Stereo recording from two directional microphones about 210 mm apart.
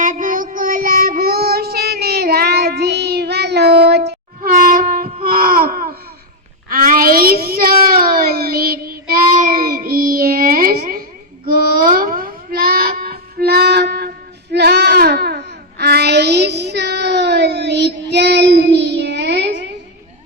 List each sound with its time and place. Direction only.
0.0 s child singing: 40° right (ahead or behind)
4.4 s a sound: 40° right (ahead or behind)
14.5 s child singing: 55° right (ahead or behind)